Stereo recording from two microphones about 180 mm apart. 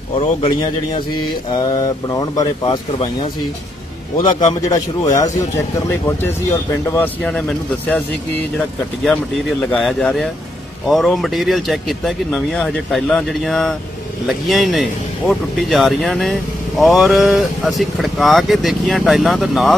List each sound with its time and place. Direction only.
0.2 s speech: 30° left (ahead or behind)
4.6 s speech: 20° left (ahead or behind)
6.9 s speech: 10° left (ahead or behind)